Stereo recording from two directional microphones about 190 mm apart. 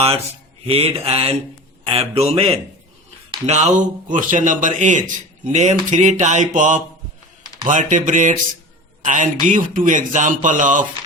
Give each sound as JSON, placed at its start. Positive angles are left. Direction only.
{"t": 0.7, "sound": "a man's voice", "side_deg": -30}